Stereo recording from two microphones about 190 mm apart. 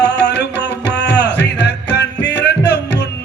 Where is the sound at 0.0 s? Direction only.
60° left (ahead or behind).